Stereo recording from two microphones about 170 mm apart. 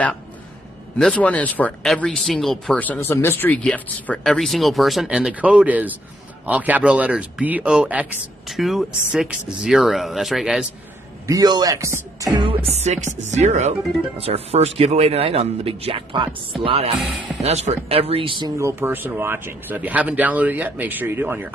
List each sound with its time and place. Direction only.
0.9 s speech: 5° left (ahead or behind)
11.2 s speech: 20° right (ahead or behind)
17.0 s speech: 5° right (ahead or behind)
17.4 s speech: 40° right (ahead or behind)
18.6 s speech: 15° right (ahead or behind)